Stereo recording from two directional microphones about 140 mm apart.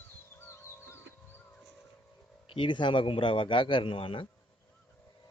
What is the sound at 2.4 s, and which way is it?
A man's voice, 40° left (ahead or behind).